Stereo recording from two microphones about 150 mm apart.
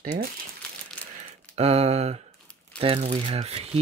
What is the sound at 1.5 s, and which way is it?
Speech, 45° right (ahead or behind).